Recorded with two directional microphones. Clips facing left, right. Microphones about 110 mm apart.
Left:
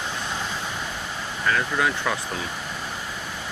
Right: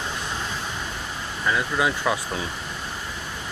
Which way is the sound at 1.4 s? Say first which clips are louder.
Even; 15° right (ahead or behind).